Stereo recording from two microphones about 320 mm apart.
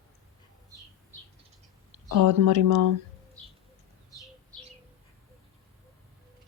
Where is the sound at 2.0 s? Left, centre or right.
Right.